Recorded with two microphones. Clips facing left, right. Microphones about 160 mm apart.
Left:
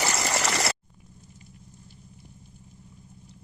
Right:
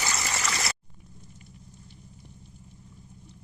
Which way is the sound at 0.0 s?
70° left (ahead or behind).